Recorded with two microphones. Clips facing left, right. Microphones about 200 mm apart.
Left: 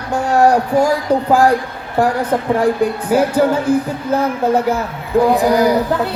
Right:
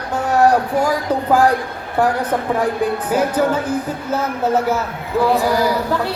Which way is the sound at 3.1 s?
10° left (ahead or behind).